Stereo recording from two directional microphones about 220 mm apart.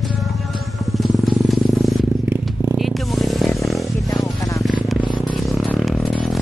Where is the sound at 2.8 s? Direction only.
Centre (ahead or behind).